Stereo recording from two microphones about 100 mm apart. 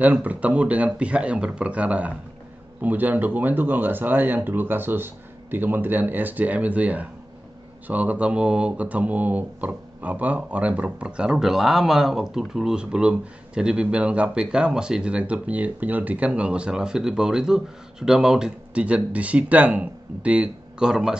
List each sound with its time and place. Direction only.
0.0 s speech: 15° right (ahead or behind)